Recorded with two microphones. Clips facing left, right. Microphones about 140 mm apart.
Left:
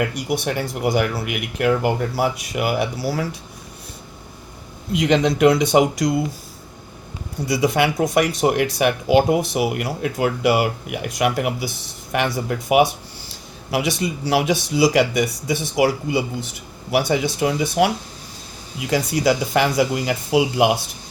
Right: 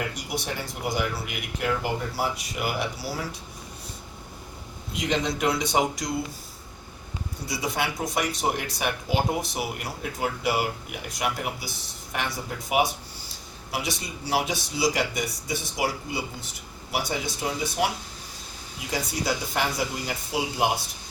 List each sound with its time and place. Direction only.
0.0 s speech: 65° left (ahead or behind)
4.9 s speech: 75° left (ahead or behind)
7.4 s speech: 80° left
13.2 s speech: 85° left